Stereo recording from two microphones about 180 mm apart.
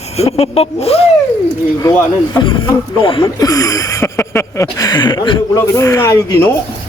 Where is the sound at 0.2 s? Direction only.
35° left (ahead or behind).